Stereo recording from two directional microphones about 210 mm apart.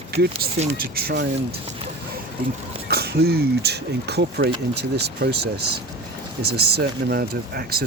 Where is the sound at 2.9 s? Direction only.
50° right (ahead or behind).